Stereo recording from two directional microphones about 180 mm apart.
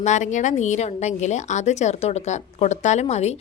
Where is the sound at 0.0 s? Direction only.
40° left (ahead or behind).